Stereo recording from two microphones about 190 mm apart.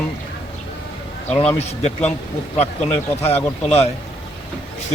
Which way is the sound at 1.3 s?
5° left (ahead or behind).